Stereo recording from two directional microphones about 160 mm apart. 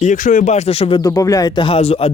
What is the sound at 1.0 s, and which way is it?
Speech, 20° left (ahead or behind).